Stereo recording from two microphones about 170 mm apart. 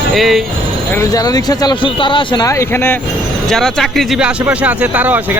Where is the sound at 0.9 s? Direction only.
20° left (ahead or behind).